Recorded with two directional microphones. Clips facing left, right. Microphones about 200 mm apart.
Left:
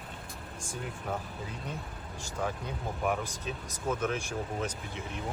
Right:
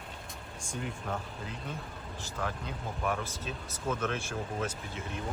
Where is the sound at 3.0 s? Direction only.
15° left (ahead or behind).